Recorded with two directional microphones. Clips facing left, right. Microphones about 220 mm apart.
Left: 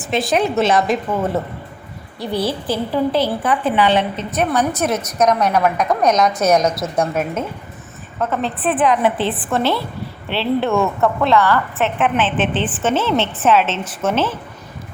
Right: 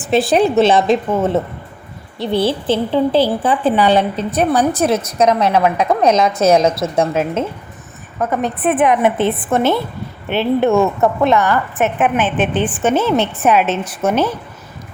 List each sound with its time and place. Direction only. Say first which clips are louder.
0.0 s a woman's voice: right 5 dB; 30° right (ahead or behind)
8.2 s a woman's voice: right 3 dB; 15° right (ahead or behind)